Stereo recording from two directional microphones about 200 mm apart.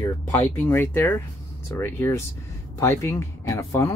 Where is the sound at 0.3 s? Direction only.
10° left (ahead or behind).